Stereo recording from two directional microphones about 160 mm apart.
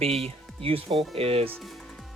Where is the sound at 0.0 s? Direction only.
40° right (ahead or behind).